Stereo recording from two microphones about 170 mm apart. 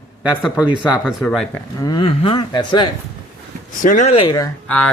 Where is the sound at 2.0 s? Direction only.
35° left (ahead or behind).